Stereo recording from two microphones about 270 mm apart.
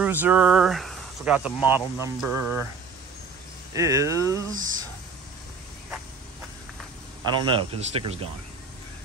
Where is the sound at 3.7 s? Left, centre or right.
Centre.